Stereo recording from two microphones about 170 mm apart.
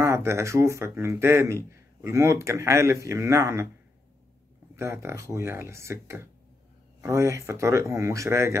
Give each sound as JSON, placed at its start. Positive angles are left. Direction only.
{"t": 0.0, "sound": "speech", "side_deg": -15}
{"t": 4.7, "sound": "speech", "side_deg": -15}